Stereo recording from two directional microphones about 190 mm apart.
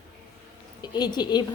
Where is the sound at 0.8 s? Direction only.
20° left (ahead or behind).